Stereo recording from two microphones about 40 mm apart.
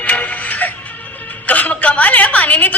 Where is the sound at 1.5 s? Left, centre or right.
Left.